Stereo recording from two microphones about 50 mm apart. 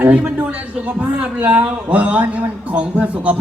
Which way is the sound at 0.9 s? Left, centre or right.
Right.